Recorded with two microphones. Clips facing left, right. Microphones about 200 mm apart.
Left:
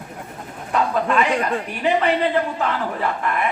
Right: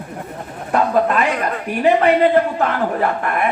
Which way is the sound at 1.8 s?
50° right (ahead or behind).